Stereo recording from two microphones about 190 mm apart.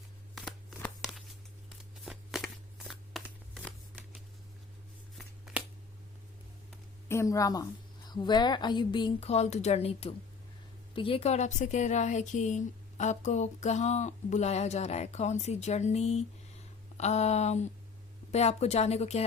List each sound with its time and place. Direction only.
0.3 s a sound: centre (ahead or behind)
5.1 s shuffling cards: centre (ahead or behind)
7.1 s a woman's voice: 15° left (ahead or behind); by 19.2 s 35° left (ahead or behind)